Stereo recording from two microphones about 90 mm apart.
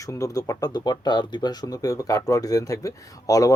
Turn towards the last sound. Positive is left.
turn(degrees=40)  # may be behind; listen again after turning